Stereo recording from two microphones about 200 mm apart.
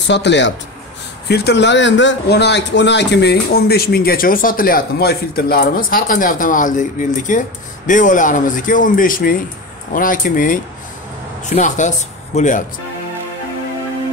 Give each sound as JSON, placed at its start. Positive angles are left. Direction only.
{"t": 0.0, "sound": "speech", "side_deg": 60}